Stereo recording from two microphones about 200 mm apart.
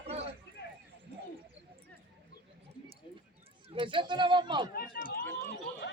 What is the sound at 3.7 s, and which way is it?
Speech, 25° right (ahead or behind).